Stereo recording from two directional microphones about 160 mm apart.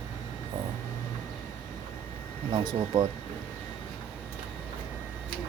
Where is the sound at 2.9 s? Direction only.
20° right (ahead or behind).